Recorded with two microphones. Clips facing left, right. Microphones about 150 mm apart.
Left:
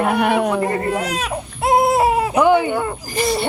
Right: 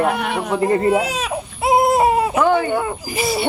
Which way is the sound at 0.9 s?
5° right (ahead or behind).